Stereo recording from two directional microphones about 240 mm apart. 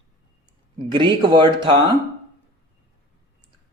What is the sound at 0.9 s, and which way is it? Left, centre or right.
Speech, centre.